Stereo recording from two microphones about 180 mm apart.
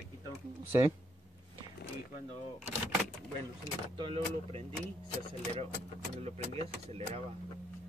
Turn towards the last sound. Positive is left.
turn(degrees=-35)  # may be behind; listen again after turning